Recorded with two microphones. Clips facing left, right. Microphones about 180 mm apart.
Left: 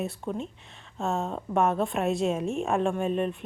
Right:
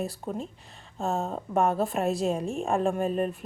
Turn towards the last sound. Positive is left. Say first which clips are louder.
# even
turn(degrees=0)  # may be behind; listen again after turning